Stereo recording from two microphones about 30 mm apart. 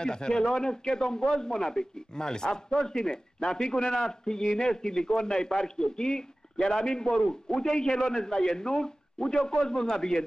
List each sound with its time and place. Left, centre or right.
0.0 s a man's voice: left